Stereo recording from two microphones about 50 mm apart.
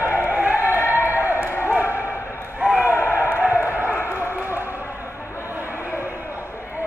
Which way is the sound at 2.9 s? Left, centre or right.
Left.